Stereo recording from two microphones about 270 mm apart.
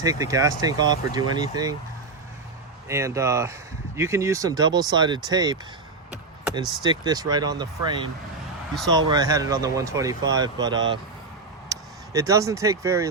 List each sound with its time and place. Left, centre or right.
0.0 s speech: centre
2.9 s speech: centre
6.4 s a sound: centre
6.8 s speech: centre